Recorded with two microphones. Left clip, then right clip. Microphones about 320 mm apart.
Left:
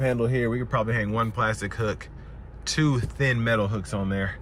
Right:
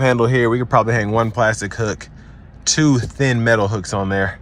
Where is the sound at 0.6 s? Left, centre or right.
Centre.